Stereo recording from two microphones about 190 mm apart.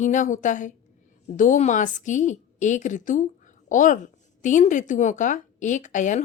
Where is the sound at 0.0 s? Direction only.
40° left (ahead or behind).